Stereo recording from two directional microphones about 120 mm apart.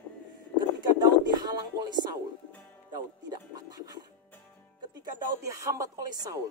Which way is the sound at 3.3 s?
35° right (ahead or behind).